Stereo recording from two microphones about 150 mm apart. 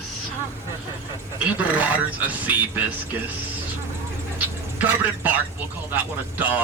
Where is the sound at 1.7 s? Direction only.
10° right (ahead or behind).